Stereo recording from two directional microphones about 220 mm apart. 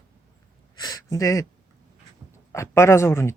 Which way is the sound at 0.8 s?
15° left (ahead or behind).